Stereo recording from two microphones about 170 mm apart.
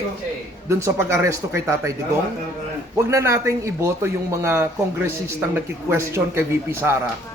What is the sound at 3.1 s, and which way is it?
Speech, 15° right (ahead or behind).